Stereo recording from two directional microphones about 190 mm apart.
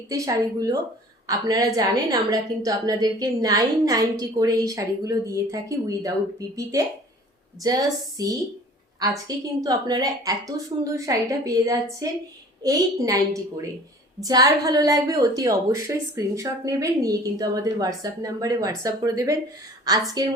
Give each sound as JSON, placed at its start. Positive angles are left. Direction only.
{"t": 0.1, "sound": "a woman's voice", "side_deg": -15}
{"t": 7.6, "sound": "a woman's voice", "side_deg": -20}